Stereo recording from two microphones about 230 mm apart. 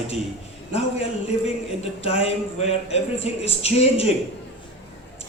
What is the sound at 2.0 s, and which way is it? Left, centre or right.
Speech, left.